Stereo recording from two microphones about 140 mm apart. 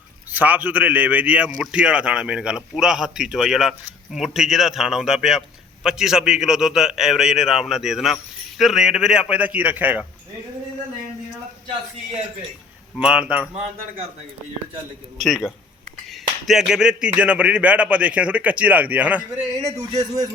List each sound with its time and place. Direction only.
0.3 s a man's voice: 10° right (ahead or behind)
13.0 s a man's voice: 5° right (ahead or behind)
13.5 s speech: 45° right (ahead or behind)
15.2 s a man's voice: centre (ahead or behind)